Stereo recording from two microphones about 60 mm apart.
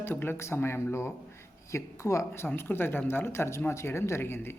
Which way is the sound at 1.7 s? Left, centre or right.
Left.